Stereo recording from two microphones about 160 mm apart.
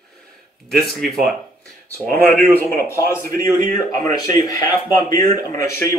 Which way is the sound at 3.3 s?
60° right (ahead or behind).